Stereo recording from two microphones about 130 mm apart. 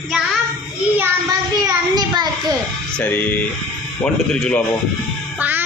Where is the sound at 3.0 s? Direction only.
15° left (ahead or behind).